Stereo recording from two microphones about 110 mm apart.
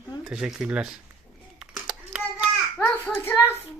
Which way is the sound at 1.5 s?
5° right (ahead or behind).